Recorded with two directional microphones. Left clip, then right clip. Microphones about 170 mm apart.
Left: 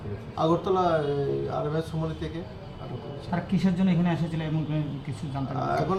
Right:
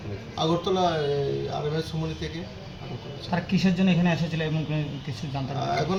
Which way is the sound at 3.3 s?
50° right (ahead or behind).